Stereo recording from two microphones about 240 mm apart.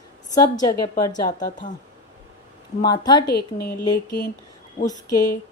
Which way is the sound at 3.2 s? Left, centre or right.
Left.